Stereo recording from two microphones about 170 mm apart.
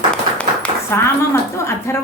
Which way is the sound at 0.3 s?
10° left (ahead or behind).